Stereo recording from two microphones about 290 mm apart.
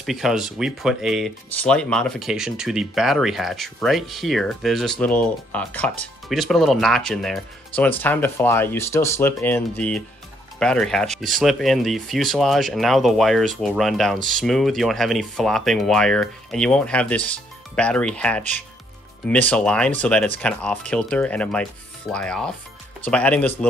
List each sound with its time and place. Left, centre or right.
0.0 s speech: centre